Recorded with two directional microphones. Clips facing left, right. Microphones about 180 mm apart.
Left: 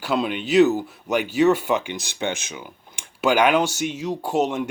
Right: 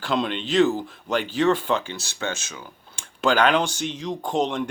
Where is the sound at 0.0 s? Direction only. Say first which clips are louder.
Left 1 dB; 5° left (ahead or behind).